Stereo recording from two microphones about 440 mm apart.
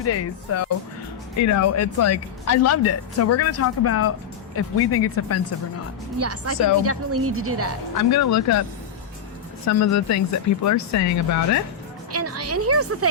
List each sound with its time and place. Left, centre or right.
0.0 s speech: left
6.1 s a woman's voice: right
7.9 s speech: left
9.6 s speech: left
12.1 s a woman's voice: right